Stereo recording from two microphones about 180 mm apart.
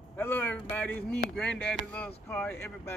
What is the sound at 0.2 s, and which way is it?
Speech, 10° left (ahead or behind).